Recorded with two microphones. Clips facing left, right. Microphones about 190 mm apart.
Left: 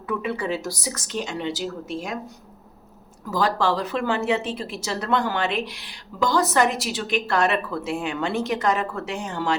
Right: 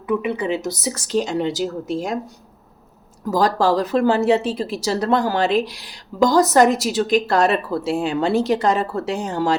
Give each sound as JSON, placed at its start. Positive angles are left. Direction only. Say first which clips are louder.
{"t": 0.1, "sound": "speech", "louder": "right 5 dB", "side_deg": -15}
{"t": 3.2, "sound": "speech", "louder": "right 5 dB", "side_deg": -40}